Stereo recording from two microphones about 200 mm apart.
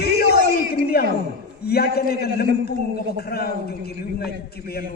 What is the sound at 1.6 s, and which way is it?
A man's voice, 50° left (ahead or behind).